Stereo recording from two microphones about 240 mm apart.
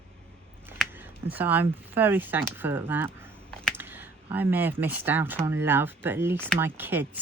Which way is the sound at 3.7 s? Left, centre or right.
Centre.